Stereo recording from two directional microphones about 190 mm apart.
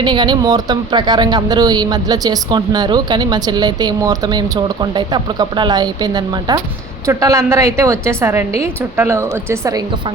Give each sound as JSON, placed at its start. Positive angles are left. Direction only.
{"t": 0.0, "sound": "a woman's voice", "side_deg": -25}